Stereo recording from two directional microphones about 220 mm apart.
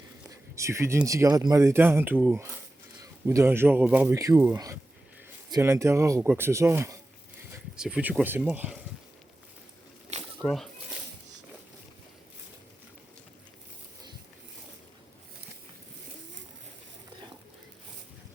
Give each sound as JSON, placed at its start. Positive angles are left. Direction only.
{"t": 0.3, "sound": "speech", "side_deg": -15}
{"t": 10.4, "sound": "speech", "side_deg": 0}